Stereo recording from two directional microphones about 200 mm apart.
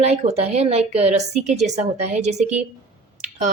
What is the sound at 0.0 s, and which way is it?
Speech, 30° right (ahead or behind).